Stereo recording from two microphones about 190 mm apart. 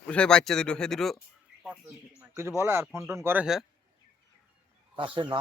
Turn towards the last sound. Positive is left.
turn(degrees=-25)  # may be behind; listen again after turning